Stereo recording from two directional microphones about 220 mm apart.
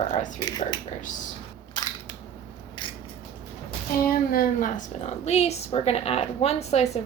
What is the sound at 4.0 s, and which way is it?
A woman's voice, 40° left (ahead or behind).